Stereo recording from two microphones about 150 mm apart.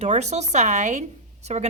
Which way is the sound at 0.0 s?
50° right (ahead or behind).